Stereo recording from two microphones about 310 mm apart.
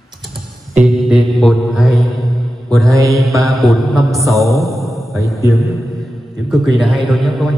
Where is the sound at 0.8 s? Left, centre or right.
Centre.